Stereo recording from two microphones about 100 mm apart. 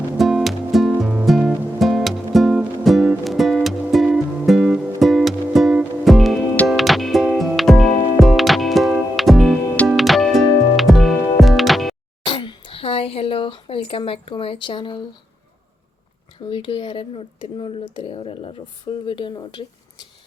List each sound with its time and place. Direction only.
0.2 s music: centre (ahead or behind)
12.2 s a sound: 55° left (ahead or behind)
16.5 s speech: 55° left (ahead or behind)